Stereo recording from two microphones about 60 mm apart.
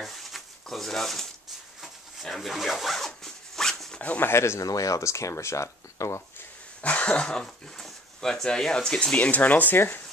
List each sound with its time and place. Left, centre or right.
0.0 s a sound: centre
1.8 s speech: centre
3.1 s zipper: centre
3.9 s zipper: left
4.2 s speech: left
4.6 s speech: left
6.8 s speech: left
9.1 s speech: left